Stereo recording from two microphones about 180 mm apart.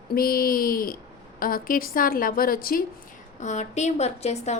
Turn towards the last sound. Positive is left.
turn(degrees=40)  # may be behind; listen again after turning